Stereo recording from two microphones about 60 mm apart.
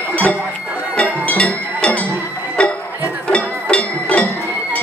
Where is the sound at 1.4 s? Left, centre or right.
Left.